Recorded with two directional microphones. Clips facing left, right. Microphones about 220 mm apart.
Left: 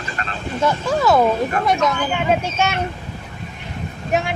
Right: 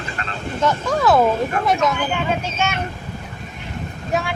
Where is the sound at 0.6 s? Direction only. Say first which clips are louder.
Even; 5° left (ahead or behind).